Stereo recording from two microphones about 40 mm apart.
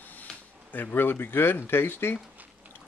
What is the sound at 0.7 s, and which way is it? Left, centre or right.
Speech, left.